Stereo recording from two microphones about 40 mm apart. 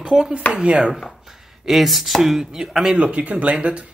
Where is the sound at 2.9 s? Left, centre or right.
Right.